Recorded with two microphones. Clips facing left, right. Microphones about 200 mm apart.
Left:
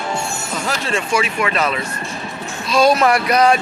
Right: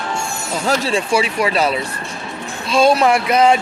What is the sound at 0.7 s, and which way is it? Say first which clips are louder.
Speech: right 4 dB; 30° right (ahead or behind).